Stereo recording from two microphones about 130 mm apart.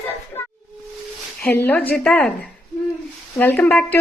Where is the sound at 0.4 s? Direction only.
15° left (ahead or behind).